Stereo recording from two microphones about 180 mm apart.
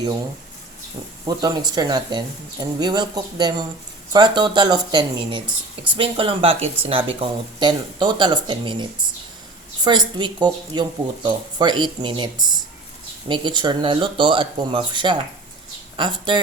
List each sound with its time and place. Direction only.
1.2 s speech: 25° right (ahead or behind)